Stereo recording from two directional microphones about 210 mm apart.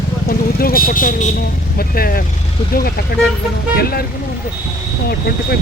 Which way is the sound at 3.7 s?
45° left (ahead or behind).